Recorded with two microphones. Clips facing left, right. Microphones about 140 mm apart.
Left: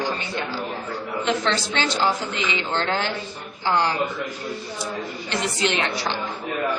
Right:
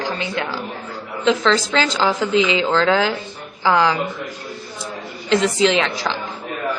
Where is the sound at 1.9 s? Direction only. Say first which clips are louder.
Right 4 dB; 90° right.